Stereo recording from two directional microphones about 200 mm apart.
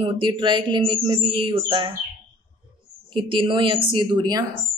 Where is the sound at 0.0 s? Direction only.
25° right (ahead or behind).